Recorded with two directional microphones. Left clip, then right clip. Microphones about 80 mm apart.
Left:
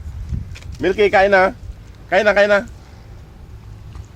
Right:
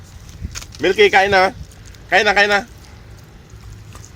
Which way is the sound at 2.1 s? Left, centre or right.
Left.